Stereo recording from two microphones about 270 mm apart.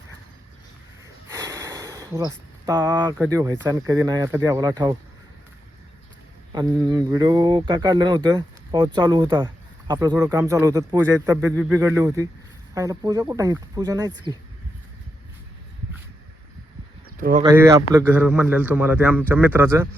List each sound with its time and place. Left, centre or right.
1.3 s speech: centre
6.5 s speech: centre
17.2 s speech: right
17.4 s speech: centre